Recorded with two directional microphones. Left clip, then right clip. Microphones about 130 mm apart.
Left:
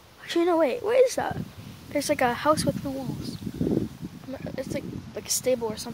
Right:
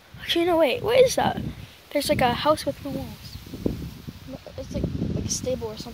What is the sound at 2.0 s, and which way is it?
Speech, 25° left (ahead or behind).